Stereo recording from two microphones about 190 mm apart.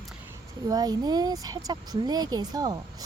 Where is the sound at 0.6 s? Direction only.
20° right (ahead or behind).